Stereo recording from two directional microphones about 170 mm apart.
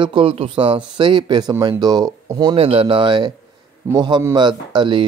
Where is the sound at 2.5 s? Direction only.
35° right (ahead or behind).